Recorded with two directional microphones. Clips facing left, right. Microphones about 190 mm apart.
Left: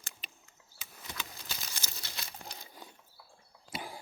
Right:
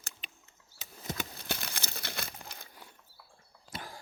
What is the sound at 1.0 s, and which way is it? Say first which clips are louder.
Crumpling: right 7 dB; 55° right (ahead or behind).